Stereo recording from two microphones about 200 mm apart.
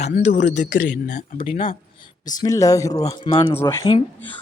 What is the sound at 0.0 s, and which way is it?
Speech, 35° left (ahead or behind).